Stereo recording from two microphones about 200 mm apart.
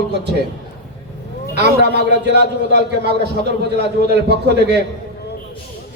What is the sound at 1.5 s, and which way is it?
A man's voice, 55° right (ahead or behind).